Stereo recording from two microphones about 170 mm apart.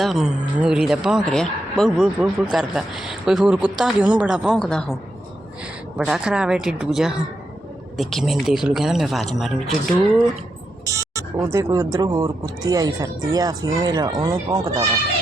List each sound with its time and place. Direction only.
0.0 s speech: centre (ahead or behind)
6.1 s speech: 5° right (ahead or behind)
10.8 s speech: 20° right (ahead or behind)